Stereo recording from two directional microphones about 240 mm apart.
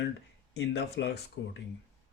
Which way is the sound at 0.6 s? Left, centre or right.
Left.